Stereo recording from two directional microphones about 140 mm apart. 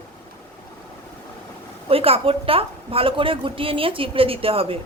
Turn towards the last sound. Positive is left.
turn(degrees=-40)  # may be behind; listen again after turning